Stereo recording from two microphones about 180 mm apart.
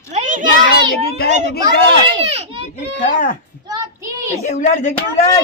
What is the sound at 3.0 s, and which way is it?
Speech, 50° left (ahead or behind).